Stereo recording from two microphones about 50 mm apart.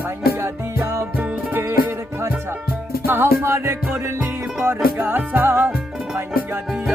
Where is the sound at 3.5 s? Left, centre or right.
Right.